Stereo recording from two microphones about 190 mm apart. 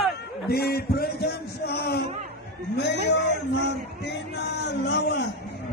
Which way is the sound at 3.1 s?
65° left (ahead or behind).